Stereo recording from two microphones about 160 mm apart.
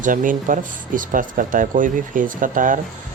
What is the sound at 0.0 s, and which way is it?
Speech, 55° right (ahead or behind).